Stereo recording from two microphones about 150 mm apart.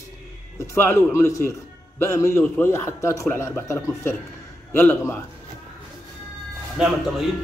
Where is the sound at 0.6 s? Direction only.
15° left (ahead or behind).